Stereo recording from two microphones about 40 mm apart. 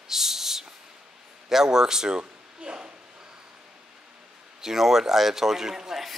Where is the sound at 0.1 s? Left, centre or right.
Centre.